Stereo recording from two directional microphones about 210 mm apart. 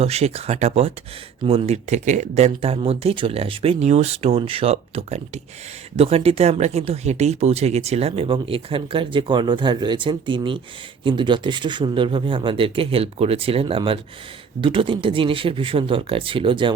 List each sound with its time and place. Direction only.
0.0 s speech: 30° right (ahead or behind)